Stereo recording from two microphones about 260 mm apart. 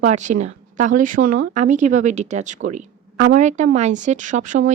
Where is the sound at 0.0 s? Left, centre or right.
Right.